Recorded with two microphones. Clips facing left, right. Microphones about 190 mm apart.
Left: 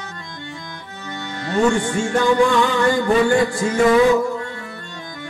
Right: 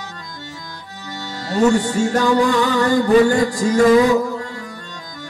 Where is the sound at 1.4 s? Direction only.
40° right (ahead or behind).